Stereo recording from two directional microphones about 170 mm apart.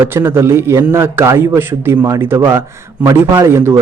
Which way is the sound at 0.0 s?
15° right (ahead or behind).